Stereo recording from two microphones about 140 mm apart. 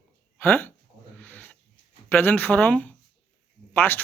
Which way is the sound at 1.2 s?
10° left (ahead or behind).